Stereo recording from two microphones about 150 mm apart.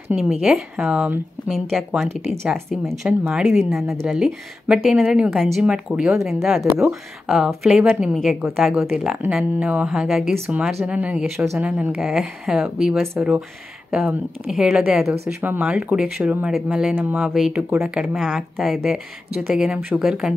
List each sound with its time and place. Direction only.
0.1 s a woman's voice: 5° right (ahead or behind)
10.3 s a woman's voice: 15° right (ahead or behind)